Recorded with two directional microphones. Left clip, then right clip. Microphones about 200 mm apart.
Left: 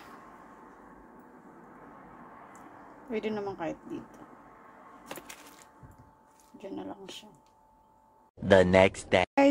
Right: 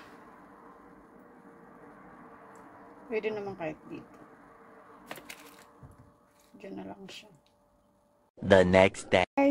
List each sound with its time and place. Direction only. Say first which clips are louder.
3.1 s speech: right 1 dB; 15° left (ahead or behind)
5.0 s a sound: even; 5° right (ahead or behind)
6.6 s speech: left 3 dB; 20° left (ahead or behind)
8.4 s speech: even; centre (ahead or behind)